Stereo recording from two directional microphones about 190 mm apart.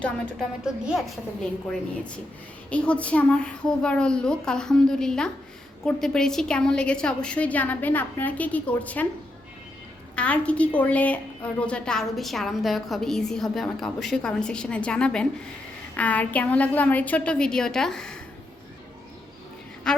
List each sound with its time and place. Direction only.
0.0 s a woman's voice: centre (ahead or behind)
2.6 s a woman's voice: 5° left (ahead or behind)
10.2 s a woman's voice: 5° left (ahead or behind)
19.9 s a woman's voice: 5° left (ahead or behind)